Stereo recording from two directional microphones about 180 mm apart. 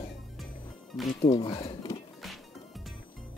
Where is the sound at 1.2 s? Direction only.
30° left (ahead or behind).